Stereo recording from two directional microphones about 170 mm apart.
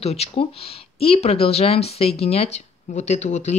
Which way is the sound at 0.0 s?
35° left (ahead or behind).